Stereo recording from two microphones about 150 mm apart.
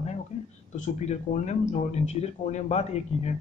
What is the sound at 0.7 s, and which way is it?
Speech, 50° left (ahead or behind).